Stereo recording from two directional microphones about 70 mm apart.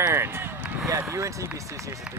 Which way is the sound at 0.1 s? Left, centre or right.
Right.